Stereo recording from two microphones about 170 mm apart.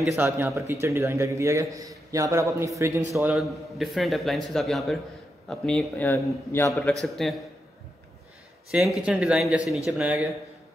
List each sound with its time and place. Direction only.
0.2 s a man's voice: 15° right (ahead or behind)
3.3 s a man's voice: centre (ahead or behind); by 6.7 s 15° left (ahead or behind)
6.9 s a man's voice: centre (ahead or behind)
8.7 s a man's voice: centre (ahead or behind)